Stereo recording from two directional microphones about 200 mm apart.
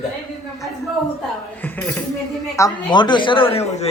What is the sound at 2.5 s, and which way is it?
Speech, 20° left (ahead or behind).